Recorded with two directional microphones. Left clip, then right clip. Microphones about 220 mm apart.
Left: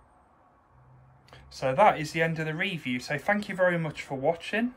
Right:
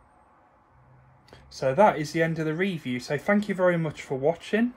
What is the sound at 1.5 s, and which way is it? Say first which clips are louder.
Speech: right 1 dB; 20° right (ahead or behind).